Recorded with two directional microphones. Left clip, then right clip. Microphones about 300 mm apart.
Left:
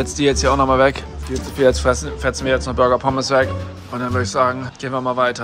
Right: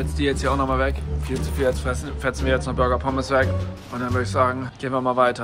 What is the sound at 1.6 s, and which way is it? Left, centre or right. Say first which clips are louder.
Speech: left 8 dB; left.